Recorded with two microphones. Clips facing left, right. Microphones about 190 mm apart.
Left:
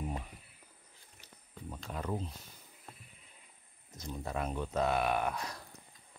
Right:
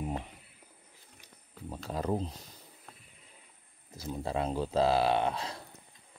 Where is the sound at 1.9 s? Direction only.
35° right (ahead or behind).